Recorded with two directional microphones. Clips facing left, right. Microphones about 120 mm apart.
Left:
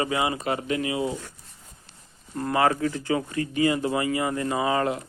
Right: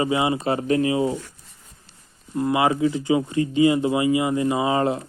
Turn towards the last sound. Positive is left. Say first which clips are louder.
# right 3 dB
turn(degrees=-25)  # may be behind; listen again after turning